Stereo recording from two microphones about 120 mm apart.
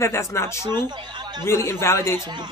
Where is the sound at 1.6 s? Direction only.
20° left (ahead or behind).